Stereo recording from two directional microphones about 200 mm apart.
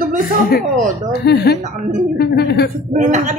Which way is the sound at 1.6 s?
40° right (ahead or behind).